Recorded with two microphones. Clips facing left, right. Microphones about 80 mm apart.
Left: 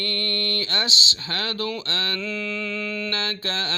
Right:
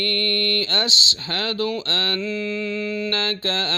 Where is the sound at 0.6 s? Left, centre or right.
Right.